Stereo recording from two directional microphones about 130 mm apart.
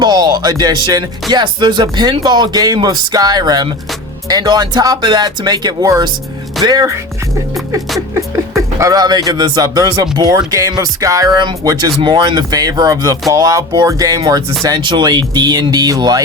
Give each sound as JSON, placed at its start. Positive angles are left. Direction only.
{"t": 0.0, "sound": "speech", "side_deg": -30}
{"t": 8.1, "sound": "speech", "side_deg": -25}